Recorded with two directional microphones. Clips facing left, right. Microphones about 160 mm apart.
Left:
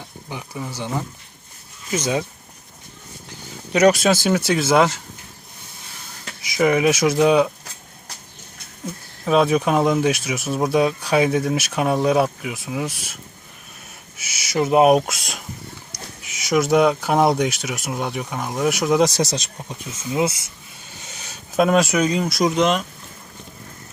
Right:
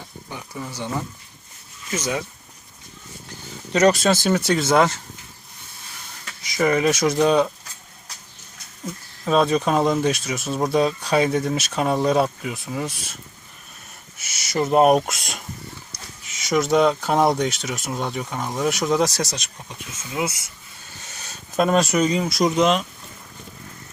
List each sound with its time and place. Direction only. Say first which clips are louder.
0.3 s speech: left 3 dB; 15° left (ahead or behind)
1.9 s speech: left 3 dB; 20° left (ahead or behind)
3.7 s speech: left 2 dB; 10° left (ahead or behind)
6.6 s speech: left 2 dB; 10° left (ahead or behind)
9.2 s speech: left 2 dB; 5° left (ahead or behind)
14.2 s owl: left 2 dB; 5° left (ahead or behind)
16.4 s speech: left 1 dB; 5° left (ahead or behind); by 20.5 s 25° left (ahead or behind)
21.0 s speech: left 1 dB; 15° left (ahead or behind)